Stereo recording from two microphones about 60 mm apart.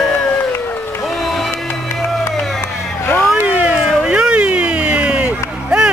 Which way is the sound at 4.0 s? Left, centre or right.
Centre.